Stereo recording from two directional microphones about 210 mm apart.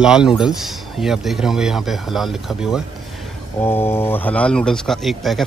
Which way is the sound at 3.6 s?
10° left (ahead or behind).